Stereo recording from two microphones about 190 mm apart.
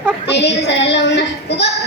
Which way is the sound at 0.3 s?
65° left (ahead or behind).